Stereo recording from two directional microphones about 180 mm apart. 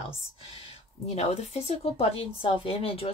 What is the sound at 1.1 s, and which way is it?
Speech, 35° left (ahead or behind).